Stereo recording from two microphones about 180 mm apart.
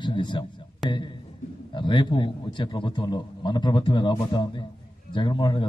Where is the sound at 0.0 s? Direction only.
25° left (ahead or behind).